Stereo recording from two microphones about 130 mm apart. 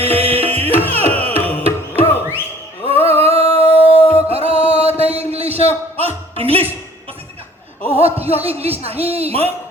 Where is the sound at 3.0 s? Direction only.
50° right (ahead or behind).